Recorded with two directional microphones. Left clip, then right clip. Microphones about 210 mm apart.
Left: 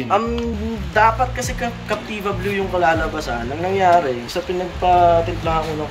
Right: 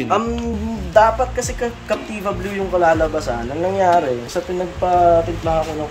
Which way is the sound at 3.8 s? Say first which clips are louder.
Left 1 dB; 20° right (ahead or behind).